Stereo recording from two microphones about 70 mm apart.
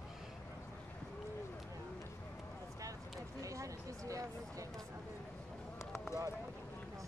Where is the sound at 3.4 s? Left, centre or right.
Right.